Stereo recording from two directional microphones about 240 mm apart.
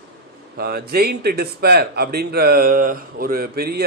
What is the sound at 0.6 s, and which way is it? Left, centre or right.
Speech, right.